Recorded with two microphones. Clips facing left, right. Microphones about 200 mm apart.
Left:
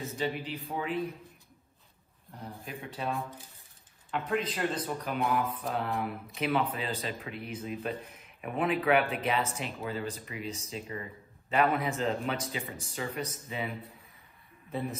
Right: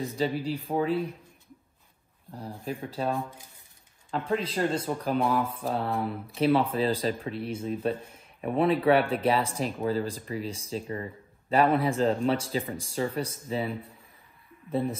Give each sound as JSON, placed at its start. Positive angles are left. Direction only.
{"t": 0.2, "sound": "speech", "side_deg": -35}
{"t": 2.6, "sound": "speech", "side_deg": -30}